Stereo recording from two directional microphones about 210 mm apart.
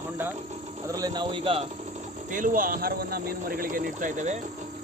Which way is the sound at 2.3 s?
40° right (ahead or behind).